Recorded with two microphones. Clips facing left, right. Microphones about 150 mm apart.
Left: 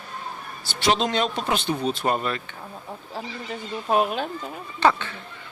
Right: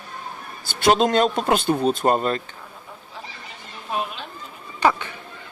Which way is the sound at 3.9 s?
50° left (ahead or behind).